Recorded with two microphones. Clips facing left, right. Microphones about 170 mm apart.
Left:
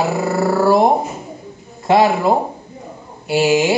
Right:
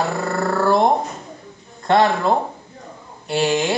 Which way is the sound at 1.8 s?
5° left (ahead or behind).